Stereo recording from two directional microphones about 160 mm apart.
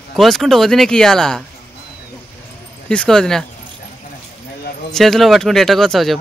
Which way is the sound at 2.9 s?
5° left (ahead or behind).